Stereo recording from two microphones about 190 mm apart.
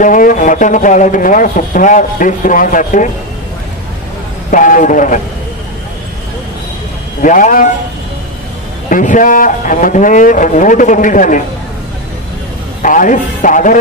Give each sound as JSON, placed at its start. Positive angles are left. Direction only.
{"t": 0.0, "sound": "speech", "side_deg": 45}
{"t": 4.5, "sound": "a man's voice", "side_deg": 45}
{"t": 7.2, "sound": "speech", "side_deg": 45}
{"t": 8.8, "sound": "speech", "side_deg": 45}
{"t": 12.8, "sound": "speech", "side_deg": 45}